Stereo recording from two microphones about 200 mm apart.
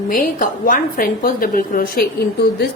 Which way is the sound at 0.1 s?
45° left (ahead or behind).